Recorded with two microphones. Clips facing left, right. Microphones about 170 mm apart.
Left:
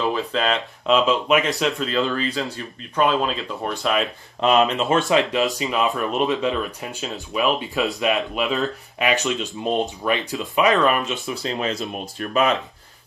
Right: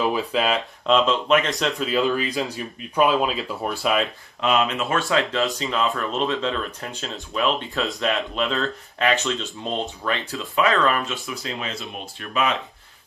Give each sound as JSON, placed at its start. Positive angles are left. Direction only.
{"t": 0.0, "sound": "speech", "side_deg": -10}
{"t": 0.8, "sound": "speech", "side_deg": 5}
{"t": 4.4, "sound": "speech", "side_deg": 35}
{"t": 11.2, "sound": "speech", "side_deg": 40}